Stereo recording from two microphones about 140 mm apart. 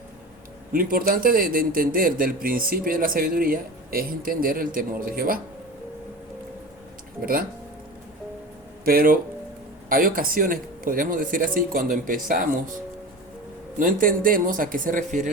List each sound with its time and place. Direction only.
0.7 s speech: 90° right
8.8 s speech: 90° right
13.7 s speech: 80° right